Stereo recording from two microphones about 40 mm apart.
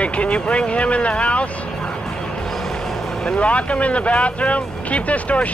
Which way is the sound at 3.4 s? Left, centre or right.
Left.